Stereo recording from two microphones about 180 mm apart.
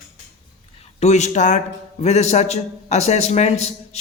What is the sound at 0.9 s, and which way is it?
A man's voice, 40° left (ahead or behind).